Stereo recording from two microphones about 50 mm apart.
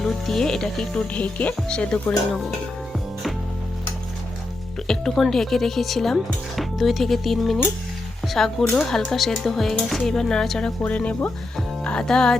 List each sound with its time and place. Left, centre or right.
0.0 s speech: centre
1.1 s speech: left
4.9 s speech: centre
10.8 s speech: left
11.8 s music: centre